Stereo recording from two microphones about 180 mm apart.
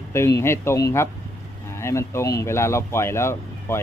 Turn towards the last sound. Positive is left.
turn(degrees=15)  # may be behind; listen again after turning